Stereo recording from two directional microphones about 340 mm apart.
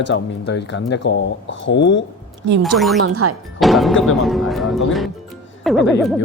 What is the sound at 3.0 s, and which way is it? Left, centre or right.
Speech, right.